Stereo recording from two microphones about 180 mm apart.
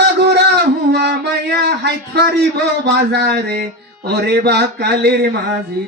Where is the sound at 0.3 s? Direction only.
65° right (ahead or behind).